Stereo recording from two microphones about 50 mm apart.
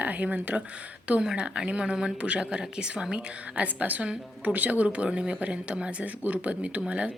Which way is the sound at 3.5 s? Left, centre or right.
Right.